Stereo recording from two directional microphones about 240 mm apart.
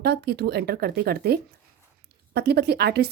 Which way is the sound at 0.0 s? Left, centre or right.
Right.